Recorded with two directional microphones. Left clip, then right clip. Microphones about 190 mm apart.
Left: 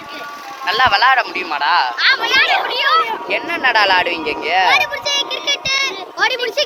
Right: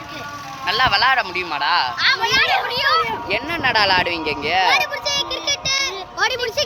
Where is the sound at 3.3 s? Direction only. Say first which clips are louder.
Left 4 dB; 15° left (ahead or behind).